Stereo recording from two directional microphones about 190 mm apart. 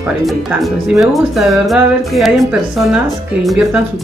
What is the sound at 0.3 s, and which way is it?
Speech, centre (ahead or behind).